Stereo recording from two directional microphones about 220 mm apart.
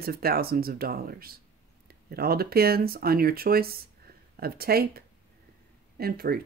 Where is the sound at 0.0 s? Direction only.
45° right (ahead or behind).